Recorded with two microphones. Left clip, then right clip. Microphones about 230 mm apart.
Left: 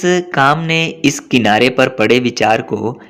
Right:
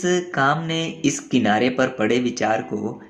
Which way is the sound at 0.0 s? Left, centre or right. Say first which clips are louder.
Left 7 dB; left.